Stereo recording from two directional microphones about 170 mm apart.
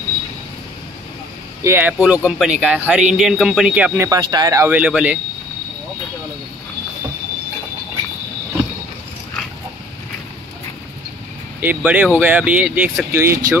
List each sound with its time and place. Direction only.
1.6 s speech: 10° right (ahead or behind)
4.2 s speech: 20° right (ahead or behind)
4.6 s speech: 5° right (ahead or behind)
11.6 s speech: 10° right (ahead or behind)